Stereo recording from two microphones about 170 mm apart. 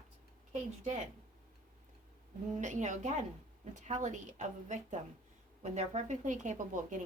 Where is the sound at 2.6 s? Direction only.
45° right (ahead or behind).